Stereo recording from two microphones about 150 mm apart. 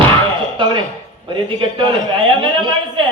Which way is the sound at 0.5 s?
30° right (ahead or behind).